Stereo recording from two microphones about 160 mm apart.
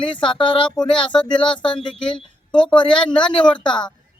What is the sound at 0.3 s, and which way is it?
Speech, 30° left (ahead or behind).